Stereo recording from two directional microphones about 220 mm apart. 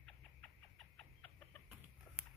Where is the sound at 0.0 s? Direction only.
5° left (ahead or behind).